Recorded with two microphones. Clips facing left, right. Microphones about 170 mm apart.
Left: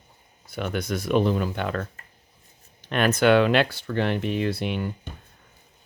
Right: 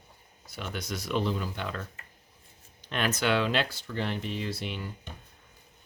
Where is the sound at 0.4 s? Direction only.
55° left (ahead or behind).